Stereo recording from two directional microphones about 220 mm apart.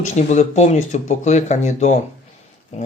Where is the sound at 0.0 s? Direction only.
30° left (ahead or behind).